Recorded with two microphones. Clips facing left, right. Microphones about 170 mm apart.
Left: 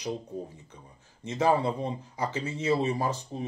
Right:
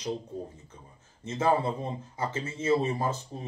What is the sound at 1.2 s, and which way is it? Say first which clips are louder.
Speech: left 1 dB; 15° left (ahead or behind).